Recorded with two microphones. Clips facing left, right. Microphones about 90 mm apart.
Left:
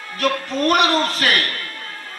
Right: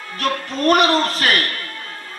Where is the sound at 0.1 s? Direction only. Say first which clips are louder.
Left 2 dB; 35° right (ahead or behind).